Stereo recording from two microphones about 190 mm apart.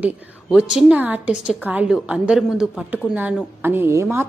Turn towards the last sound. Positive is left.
turn(degrees=-15)  # may be behind; listen again after turning